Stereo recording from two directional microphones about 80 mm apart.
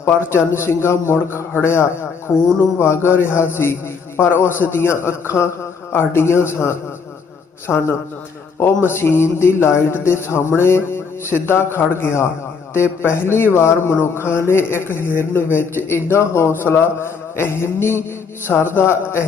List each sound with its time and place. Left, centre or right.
0.3 s speech: left